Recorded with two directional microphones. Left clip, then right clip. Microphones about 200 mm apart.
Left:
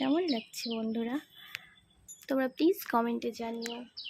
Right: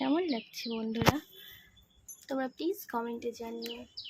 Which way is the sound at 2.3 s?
25° left (ahead or behind).